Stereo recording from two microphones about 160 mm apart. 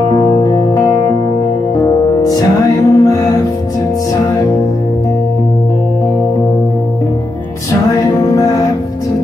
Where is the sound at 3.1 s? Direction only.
25° left (ahead or behind).